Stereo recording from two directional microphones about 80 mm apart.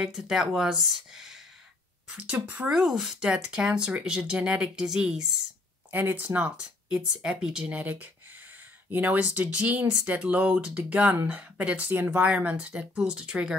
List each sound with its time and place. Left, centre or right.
0.0 s speech: centre
2.7 s speech: centre
5.9 s speech: right
7.6 s speech: right